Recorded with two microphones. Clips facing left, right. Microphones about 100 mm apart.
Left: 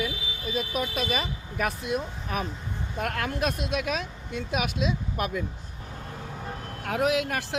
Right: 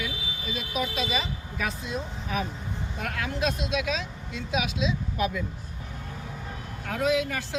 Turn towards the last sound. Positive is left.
turn(degrees=65)  # may be behind; listen again after turning